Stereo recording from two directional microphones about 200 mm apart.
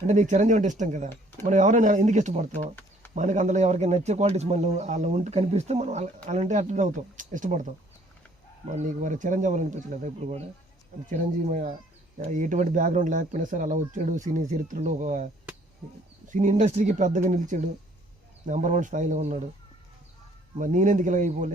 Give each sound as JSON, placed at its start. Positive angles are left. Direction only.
{"t": 0.1, "sound": "speech", "side_deg": -35}
{"t": 20.6, "sound": "speech", "side_deg": -40}